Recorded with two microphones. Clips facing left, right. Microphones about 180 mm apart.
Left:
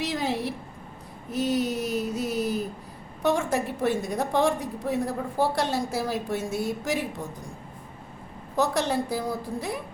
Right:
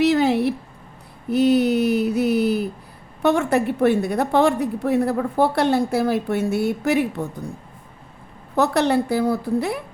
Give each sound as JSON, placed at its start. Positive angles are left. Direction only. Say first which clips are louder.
{"t": 0.0, "sound": "a sound", "louder": "right 11 dB", "side_deg": -70}
{"t": 3.2, "sound": "a woman's voice", "louder": "right 6 dB", "side_deg": -65}
{"t": 8.5, "sound": "a woman's voice", "louder": "right 6 dB", "side_deg": -65}